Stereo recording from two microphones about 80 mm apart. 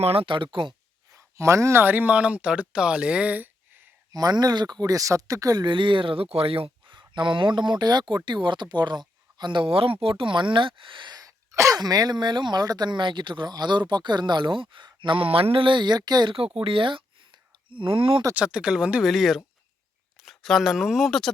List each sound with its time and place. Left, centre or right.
0.3 s speech: right
1.1 s speech: right
1.8 s speech: right
4.1 s speech: right
5.6 s speech: right
10.1 s speech: right
11.2 s throat clearing: right
11.8 s speech: right
16.6 s a sound: right
18.3 s speech: centre
19.0 s speech: centre